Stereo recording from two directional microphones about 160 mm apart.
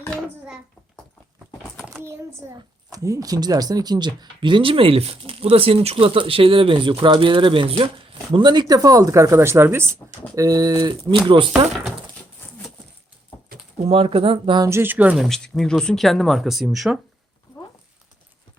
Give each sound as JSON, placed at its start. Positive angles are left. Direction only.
{"t": 2.9, "sound": "speech", "side_deg": -20}
{"t": 13.7, "sound": "speech", "side_deg": -35}
{"t": 14.7, "sound": "speech", "side_deg": -15}
{"t": 15.3, "sound": "speech", "side_deg": 5}